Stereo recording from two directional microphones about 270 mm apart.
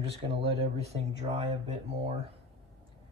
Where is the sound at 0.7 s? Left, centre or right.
Right.